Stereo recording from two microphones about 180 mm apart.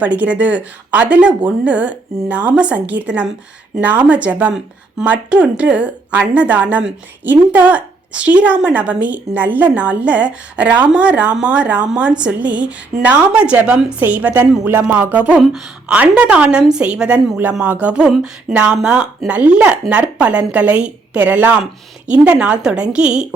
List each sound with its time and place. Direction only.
0.0 s speech: 10° right (ahead or behind)